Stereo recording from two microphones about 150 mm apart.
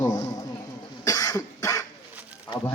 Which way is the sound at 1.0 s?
25° left (ahead or behind).